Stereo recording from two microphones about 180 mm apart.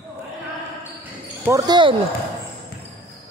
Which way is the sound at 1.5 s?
20° right (ahead or behind).